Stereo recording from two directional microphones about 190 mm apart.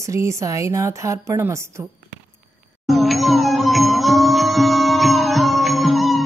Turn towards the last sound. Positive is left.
turn(degrees=0)  # may be behind; listen again after turning